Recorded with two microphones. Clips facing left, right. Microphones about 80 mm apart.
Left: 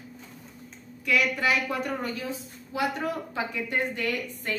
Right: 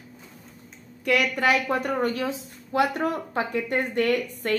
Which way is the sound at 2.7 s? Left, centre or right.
Right.